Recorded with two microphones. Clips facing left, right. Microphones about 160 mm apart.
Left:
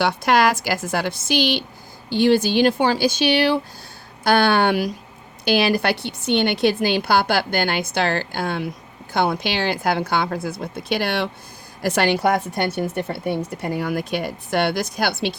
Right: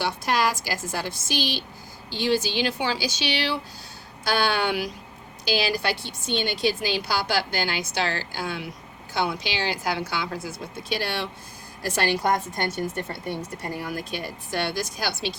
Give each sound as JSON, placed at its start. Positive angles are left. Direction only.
{"t": 0.0, "sound": "a woman's voice", "side_deg": 65}
{"t": 2.0, "sound": "a woman's voice", "side_deg": 55}